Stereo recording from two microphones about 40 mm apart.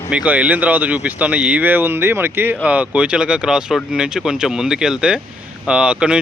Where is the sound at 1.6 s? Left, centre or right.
Right.